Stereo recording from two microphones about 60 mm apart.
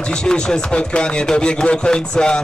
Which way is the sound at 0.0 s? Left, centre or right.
Centre.